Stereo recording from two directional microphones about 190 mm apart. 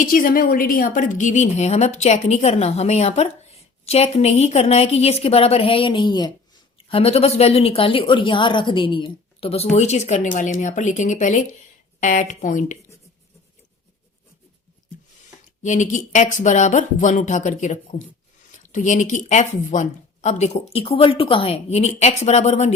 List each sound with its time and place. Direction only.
0.0 s a woman's voice: 45° left (ahead or behind)
15.6 s a woman's voice: 40° left (ahead or behind)